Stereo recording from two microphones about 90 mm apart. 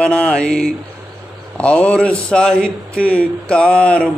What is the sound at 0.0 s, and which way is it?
Mantra, 10° left (ahead or behind).